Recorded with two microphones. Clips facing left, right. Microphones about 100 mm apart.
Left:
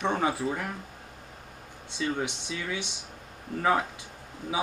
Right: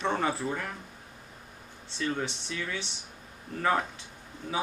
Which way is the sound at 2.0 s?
15° left (ahead or behind).